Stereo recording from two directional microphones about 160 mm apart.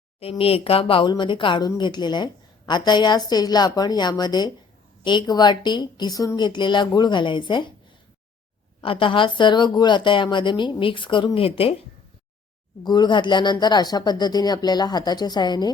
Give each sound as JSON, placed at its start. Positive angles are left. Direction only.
{"t": 0.2, "sound": "speech", "side_deg": 35}
{"t": 8.8, "sound": "speech", "side_deg": 35}
{"t": 12.8, "sound": "speech", "side_deg": 25}